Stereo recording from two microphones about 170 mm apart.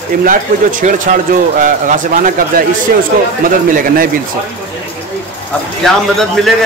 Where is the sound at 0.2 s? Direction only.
50° right (ahead or behind).